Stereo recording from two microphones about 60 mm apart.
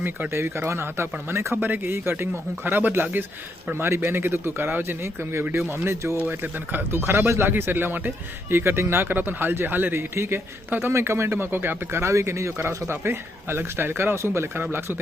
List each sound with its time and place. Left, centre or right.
0.3 s speech: right
1.6 s speech: right
6.1 s speech: right